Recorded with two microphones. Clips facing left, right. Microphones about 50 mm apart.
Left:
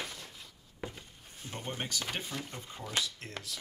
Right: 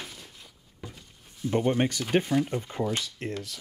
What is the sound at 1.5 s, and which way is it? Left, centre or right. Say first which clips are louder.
Speech: right 13 dB; right.